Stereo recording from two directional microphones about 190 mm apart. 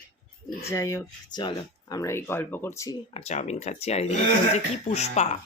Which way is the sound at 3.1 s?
35° left (ahead or behind).